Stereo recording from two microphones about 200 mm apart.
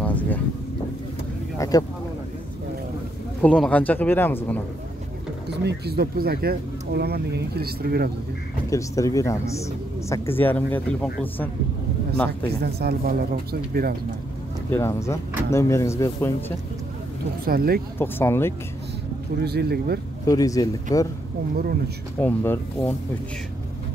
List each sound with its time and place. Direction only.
0.0 s vehicle: 5° left (ahead or behind)
1.6 s speech: 20° left (ahead or behind)
3.4 s speech: 5° left (ahead or behind)
5.5 s speech: 55° right (ahead or behind)
8.6 s speech: 15° left (ahead or behind)
12.3 s speech: 50° right (ahead or behind)
14.7 s speech: 15° left (ahead or behind)
17.5 s speech: 50° right (ahead or behind)
17.9 s speech: 10° left (ahead or behind)
19.4 s speech: 50° right (ahead or behind)
20.2 s speech: 15° left (ahead or behind)
21.5 s speech: 50° right (ahead or behind)
22.2 s speech: 10° left (ahead or behind)